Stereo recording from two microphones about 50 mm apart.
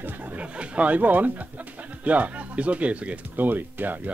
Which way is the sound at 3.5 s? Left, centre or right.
Right.